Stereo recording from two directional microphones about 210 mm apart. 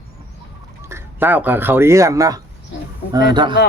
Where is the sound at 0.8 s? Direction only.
10° right (ahead or behind).